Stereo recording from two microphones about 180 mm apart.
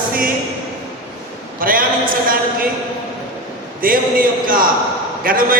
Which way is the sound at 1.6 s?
50° right (ahead or behind).